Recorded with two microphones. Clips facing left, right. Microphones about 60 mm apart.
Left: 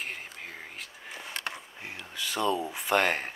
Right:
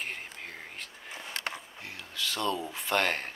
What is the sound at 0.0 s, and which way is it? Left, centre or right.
Whispering, centre.